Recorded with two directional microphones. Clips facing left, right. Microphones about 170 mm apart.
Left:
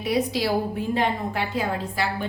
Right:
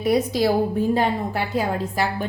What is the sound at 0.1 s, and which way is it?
A woman's voice, 45° right (ahead or behind).